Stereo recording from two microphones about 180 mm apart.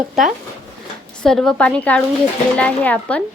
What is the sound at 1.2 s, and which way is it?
A woman's voice, 5° left (ahead or behind).